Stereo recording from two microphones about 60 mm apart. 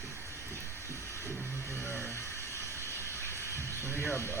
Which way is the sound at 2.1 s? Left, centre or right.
Left.